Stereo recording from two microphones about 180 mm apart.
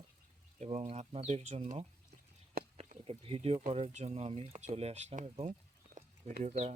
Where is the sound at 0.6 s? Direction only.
40° right (ahead or behind).